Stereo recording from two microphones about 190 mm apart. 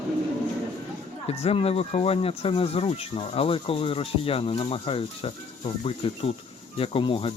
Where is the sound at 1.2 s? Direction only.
30° left (ahead or behind).